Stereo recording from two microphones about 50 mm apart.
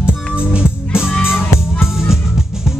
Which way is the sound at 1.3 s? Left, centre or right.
Centre.